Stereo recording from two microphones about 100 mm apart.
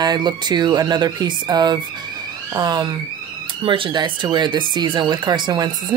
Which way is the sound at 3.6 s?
60° right (ahead or behind).